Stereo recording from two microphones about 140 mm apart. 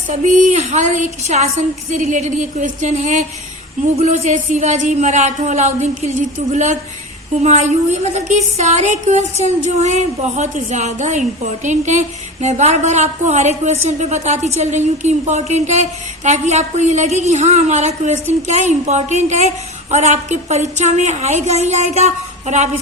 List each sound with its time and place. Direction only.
0.1 s a woman's voice: 65° right (ahead or behind)